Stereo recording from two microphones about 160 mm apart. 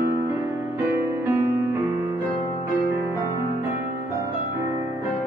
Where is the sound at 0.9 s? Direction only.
15° right (ahead or behind).